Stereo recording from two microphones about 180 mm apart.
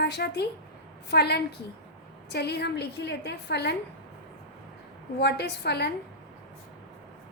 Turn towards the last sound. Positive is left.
turn(degrees=65)  # may be behind; listen again after turning